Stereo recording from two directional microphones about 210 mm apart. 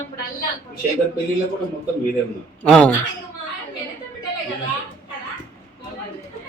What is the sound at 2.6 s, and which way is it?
Speech, 5° left (ahead or behind).